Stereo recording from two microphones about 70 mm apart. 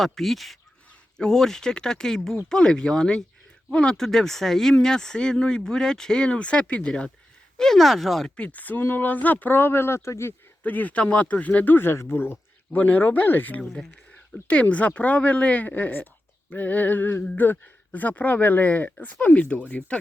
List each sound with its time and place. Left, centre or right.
0.0 s speech: centre
8.4 s speech: left
10.6 s speech: left
12.7 s speech: left
13.6 s speech: centre